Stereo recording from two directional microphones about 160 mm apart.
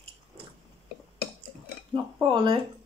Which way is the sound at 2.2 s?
30° right (ahead or behind).